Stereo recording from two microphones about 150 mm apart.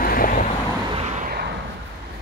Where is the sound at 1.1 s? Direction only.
70° right (ahead or behind).